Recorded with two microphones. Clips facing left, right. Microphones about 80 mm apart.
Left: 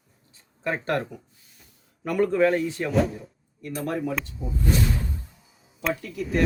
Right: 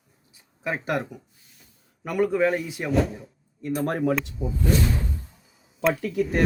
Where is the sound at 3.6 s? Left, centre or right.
Right.